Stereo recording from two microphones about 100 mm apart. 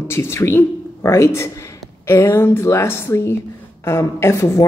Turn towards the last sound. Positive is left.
turn(degrees=30)  # may be behind; listen again after turning